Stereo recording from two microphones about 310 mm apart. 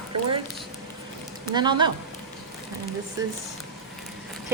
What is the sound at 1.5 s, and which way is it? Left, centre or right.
Speech, centre.